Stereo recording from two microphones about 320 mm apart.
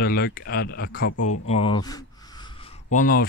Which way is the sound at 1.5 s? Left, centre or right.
Centre.